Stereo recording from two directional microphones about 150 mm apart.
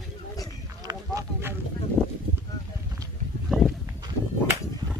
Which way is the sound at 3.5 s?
Centre (ahead or behind).